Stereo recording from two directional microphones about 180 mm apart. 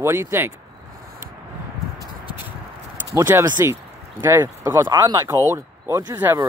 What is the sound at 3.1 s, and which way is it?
Speech, 15° right (ahead or behind).